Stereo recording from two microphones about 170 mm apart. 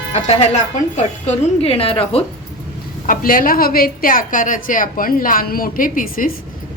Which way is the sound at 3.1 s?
55° left (ahead or behind).